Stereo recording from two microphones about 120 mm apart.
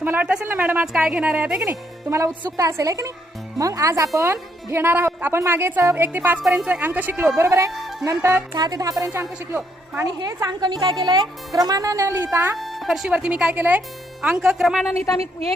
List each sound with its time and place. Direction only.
0.0 s a woman's voice: 15° right (ahead or behind)
1.6 s speech: 25° right (ahead or behind)
6.4 s a woman's voice: 5° right (ahead or behind); by 7.7 s 25° right (ahead or behind)
7.7 s speech: centre (ahead or behind)
8.0 s speech: 25° right (ahead or behind)
8.5 s speech: 35° right (ahead or behind)
10.2 s speech: 30° right (ahead or behind)
12.5 s speech: centre (ahead or behind)